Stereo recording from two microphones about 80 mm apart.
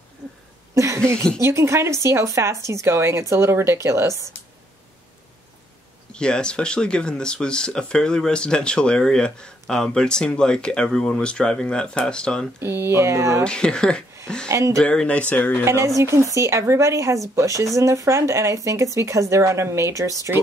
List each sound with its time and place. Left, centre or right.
0.7 s speech: right
6.1 s speech: centre
12.5 s speech: right
13.4 s speech: centre
14.5 s speech: right
14.8 s speech: centre
15.6 s speech: right